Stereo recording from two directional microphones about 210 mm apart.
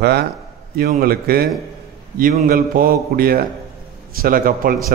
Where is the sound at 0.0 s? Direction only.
50° right (ahead or behind).